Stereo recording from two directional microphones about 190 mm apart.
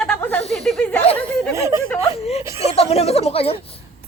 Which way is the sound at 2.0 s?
35° left (ahead or behind).